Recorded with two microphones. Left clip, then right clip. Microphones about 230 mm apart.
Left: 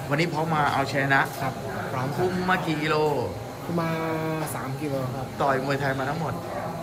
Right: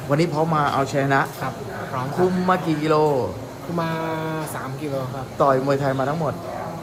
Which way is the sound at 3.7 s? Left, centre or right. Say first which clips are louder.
Right 3 dB; centre.